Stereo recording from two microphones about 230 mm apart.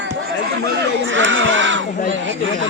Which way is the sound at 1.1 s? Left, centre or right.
Right.